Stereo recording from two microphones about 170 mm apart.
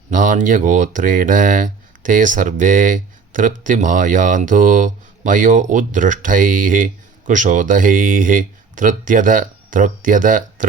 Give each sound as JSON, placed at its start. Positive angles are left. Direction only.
{"t": 0.1, "sound": "speech", "side_deg": -50}